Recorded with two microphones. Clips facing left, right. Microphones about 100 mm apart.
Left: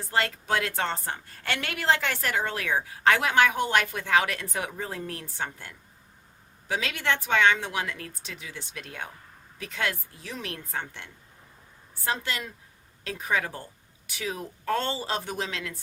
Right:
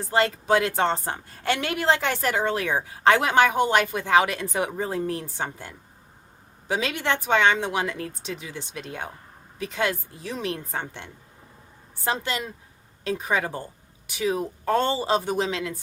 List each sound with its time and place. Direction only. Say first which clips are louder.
0.1 s a woman's voice: right 6 dB; 20° right (ahead or behind)